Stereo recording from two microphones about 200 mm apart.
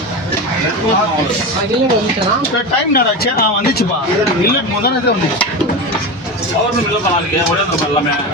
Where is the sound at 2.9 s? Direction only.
50° left (ahead or behind).